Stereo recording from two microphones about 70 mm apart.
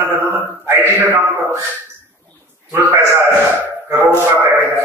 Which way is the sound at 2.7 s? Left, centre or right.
Right.